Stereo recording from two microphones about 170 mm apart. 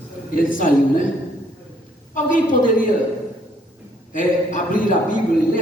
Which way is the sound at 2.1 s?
50° left (ahead or behind).